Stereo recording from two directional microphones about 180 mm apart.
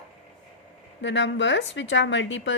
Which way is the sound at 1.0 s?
85° left.